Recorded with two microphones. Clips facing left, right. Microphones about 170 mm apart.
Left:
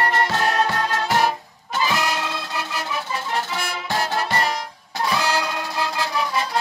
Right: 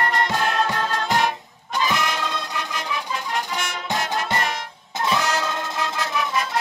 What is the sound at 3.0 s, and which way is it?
Music, 15° right (ahead or behind).